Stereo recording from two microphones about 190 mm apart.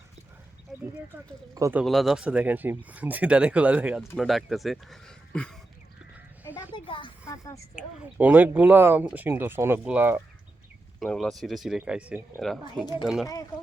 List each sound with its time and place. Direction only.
0.7 s a sound: centre (ahead or behind)
1.5 s speech: 15° right (ahead or behind)
1.8 s speech: centre (ahead or behind)
6.7 s a woman's voice: 25° left (ahead or behind)
7.8 s speech: 10° right (ahead or behind)
11.0 s speech: 5° left (ahead or behind)